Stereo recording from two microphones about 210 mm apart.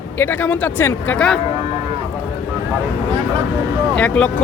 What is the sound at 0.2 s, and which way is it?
Speech, 10° left (ahead or behind).